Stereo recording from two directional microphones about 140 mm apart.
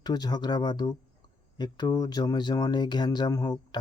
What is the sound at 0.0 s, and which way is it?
Speech, 30° left (ahead or behind).